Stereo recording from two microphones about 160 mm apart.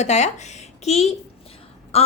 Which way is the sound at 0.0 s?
45° left (ahead or behind).